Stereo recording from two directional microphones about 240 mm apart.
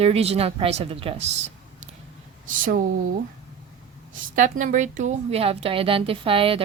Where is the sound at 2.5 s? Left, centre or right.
Right.